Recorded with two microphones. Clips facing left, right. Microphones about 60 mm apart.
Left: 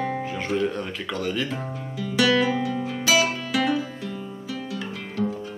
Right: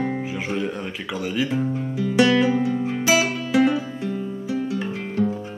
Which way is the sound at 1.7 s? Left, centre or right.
Right.